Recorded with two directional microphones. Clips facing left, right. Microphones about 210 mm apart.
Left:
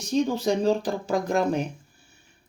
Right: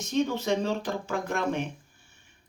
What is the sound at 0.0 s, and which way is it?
Speech, 35° left (ahead or behind).